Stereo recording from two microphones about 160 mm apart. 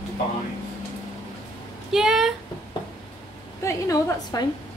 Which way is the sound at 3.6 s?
20° left (ahead or behind).